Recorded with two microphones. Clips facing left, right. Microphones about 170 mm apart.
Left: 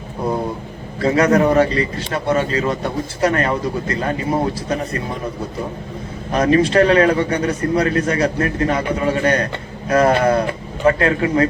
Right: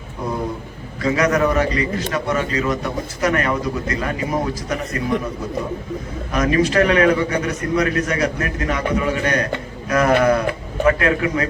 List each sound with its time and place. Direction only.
1.0 s a man's voice: 30° left (ahead or behind)
6.3 s a man's voice: 30° left (ahead or behind)